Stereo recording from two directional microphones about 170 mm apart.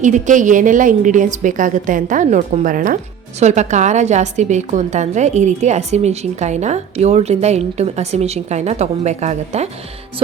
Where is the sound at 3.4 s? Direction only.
45° right (ahead or behind).